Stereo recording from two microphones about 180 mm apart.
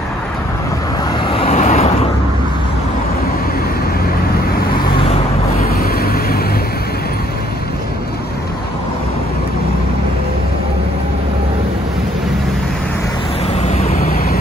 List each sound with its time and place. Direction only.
1.3 s vehicle: 35° left (ahead or behind)
5.8 s vehicle: 55° left (ahead or behind)
13.6 s vehicle: 40° left (ahead or behind)
13.9 s vehicle: 55° left (ahead or behind)